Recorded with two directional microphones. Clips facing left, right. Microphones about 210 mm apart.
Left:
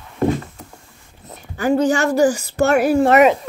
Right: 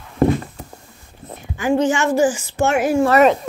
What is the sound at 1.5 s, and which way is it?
Speech, 40° left (ahead or behind).